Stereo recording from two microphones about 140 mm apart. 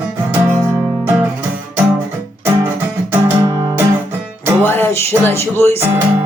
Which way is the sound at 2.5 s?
15° right (ahead or behind).